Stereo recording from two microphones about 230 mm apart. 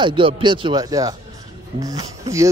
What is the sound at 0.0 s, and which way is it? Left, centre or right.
A man's voice, right.